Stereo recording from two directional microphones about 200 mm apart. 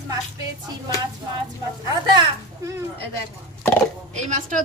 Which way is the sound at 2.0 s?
20° right (ahead or behind).